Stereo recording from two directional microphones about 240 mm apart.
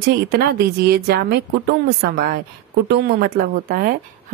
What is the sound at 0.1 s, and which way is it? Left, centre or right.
A woman's voice, right.